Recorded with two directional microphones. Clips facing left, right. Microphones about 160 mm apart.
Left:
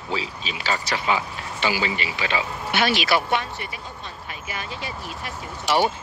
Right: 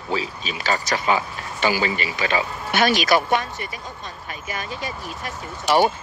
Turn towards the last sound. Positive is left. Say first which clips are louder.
# right 3 dB
turn(degrees=-45)  # may be behind; listen again after turning